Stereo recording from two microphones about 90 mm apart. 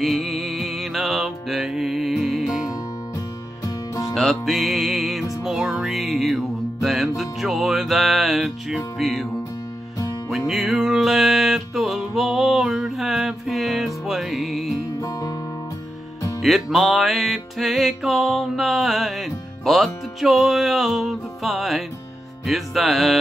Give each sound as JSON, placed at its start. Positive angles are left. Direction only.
{"t": 0.0, "sound": "music", "side_deg": 0}
{"t": 3.6, "sound": "music", "side_deg": 40}
{"t": 4.1, "sound": "music", "side_deg": 0}
{"t": 10.3, "sound": "music", "side_deg": -5}
{"t": 15.0, "sound": "music", "side_deg": 40}
{"t": 16.3, "sound": "music", "side_deg": 0}